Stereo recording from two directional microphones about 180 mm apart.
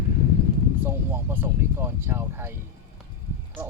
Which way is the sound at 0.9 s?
10° right (ahead or behind).